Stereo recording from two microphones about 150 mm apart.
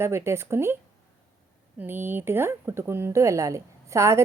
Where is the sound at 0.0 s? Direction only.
15° right (ahead or behind).